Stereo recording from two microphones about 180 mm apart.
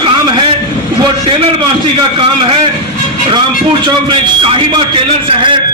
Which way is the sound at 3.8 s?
25° right (ahead or behind).